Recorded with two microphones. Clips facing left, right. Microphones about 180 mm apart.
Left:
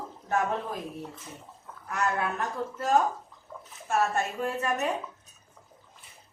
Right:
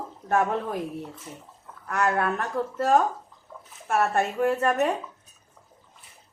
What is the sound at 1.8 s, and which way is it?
Speech, 60° right (ahead or behind).